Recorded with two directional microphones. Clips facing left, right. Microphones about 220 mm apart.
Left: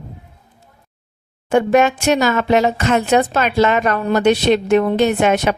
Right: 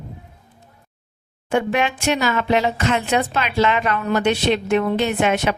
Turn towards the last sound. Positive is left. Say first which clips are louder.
# left 4 dB
turn(degrees=45)  # may be behind; listen again after turning